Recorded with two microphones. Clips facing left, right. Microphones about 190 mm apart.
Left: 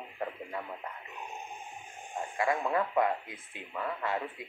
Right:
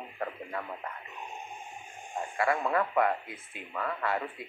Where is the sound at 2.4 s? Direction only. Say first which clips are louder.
Right 1 dB; 20° left (ahead or behind).